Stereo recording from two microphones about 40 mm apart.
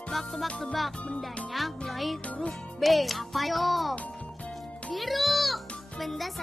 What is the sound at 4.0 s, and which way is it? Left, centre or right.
Music, left.